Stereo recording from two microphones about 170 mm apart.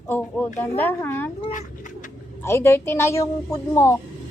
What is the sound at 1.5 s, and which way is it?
Cat, 50° left (ahead or behind).